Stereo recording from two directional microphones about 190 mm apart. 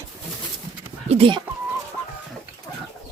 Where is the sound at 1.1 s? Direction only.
30° right (ahead or behind).